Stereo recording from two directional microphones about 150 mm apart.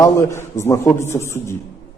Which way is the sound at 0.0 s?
20° left (ahead or behind).